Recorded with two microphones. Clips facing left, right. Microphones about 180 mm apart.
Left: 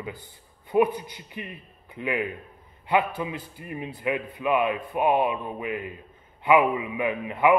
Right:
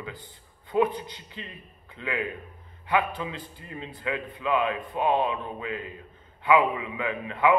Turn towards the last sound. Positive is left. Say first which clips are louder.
# left 2 dB
turn(degrees=15)  # may be behind; listen again after turning